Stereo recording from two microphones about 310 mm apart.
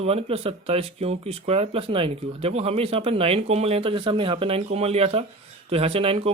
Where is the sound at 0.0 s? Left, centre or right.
Centre.